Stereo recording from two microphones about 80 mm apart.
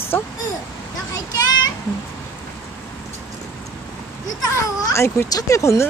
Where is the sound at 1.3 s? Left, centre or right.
Left.